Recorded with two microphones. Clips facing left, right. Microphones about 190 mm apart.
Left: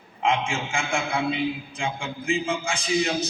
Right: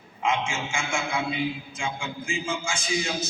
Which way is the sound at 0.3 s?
35° left (ahead or behind).